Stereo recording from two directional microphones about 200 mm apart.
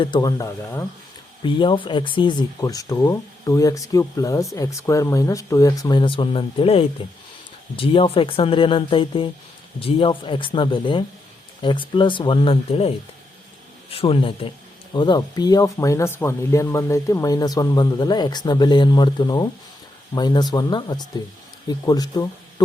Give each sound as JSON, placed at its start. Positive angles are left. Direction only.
{"t": 0.0, "sound": "speech", "side_deg": 20}
{"t": 13.9, "sound": "speech", "side_deg": 30}